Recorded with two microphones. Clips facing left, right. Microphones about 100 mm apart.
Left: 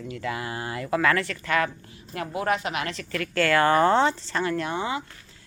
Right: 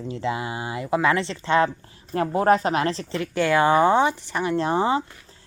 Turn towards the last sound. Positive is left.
turn(degrees=-35)  # may be behind; listen again after turning